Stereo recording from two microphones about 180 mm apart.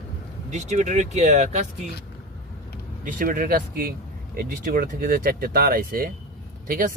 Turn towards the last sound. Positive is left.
turn(degrees=-50)  # may be behind; listen again after turning